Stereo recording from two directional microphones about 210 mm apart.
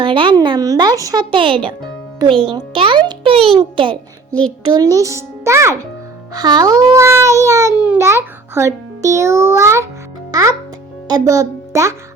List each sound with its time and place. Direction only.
0.0 s a child's voice: 25° right (ahead or behind)
4.3 s a child's voice: 5° left (ahead or behind)
4.7 s speech: 15° right (ahead or behind)
11.1 s a child's voice: 15° right (ahead or behind)